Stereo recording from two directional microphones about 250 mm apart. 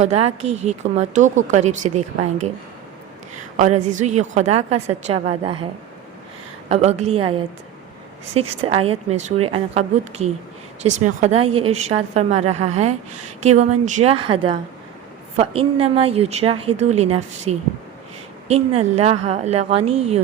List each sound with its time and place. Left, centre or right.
0.0 s a woman's voice: right
3.6 s a woman's voice: right
6.7 s a woman's voice: right